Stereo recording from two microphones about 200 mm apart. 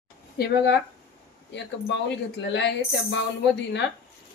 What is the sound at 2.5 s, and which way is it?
Speech, 60° left (ahead or behind).